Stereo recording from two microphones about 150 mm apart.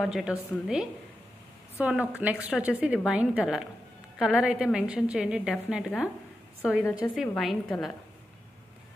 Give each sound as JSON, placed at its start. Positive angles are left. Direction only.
{"t": 0.0, "sound": "a woman's voice", "side_deg": -5}
{"t": 6.8, "sound": "a woman's voice", "side_deg": 20}
{"t": 7.2, "sound": "a woman's voice", "side_deg": 0}